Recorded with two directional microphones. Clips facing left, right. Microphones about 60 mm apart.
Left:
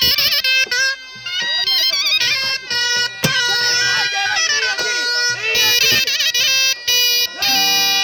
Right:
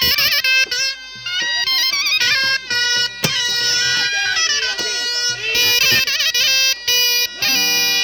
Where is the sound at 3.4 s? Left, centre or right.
Left.